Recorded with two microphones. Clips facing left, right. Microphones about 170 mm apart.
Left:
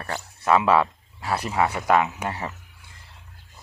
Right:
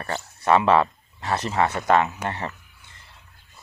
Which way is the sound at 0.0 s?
5° left (ahead or behind).